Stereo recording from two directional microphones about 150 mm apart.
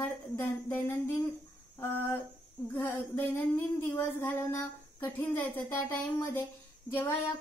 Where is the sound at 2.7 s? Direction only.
15° left (ahead or behind).